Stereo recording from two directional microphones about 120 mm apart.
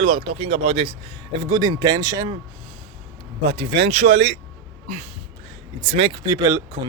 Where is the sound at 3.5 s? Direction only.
55° right (ahead or behind).